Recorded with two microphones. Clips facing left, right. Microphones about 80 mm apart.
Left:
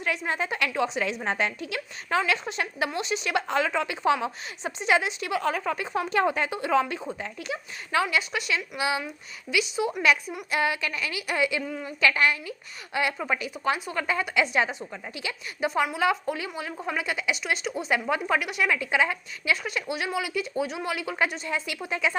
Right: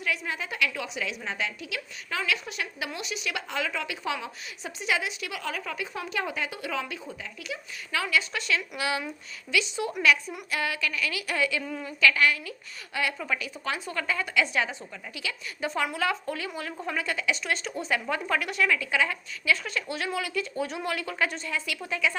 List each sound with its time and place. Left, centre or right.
0.0 s a woman's voice: left
8.0 s a woman's voice: centre
10.5 s speech: left
11.6 s a woman's voice: centre
11.9 s a woman's voice: left; by 18.7 s centre
18.7 s a woman's voice: left
21.4 s speech: left